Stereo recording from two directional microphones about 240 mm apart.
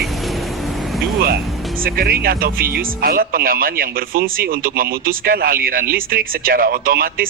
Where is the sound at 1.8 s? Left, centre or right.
Right.